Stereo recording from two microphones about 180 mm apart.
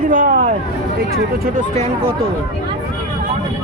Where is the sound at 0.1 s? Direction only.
50° right (ahead or behind).